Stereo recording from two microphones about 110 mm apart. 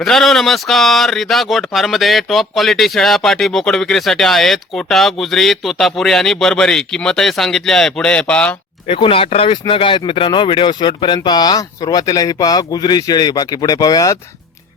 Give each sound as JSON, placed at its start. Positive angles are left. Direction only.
{"t": 0.0, "sound": "speech", "side_deg": 0}
{"t": 8.9, "sound": "speech", "side_deg": 55}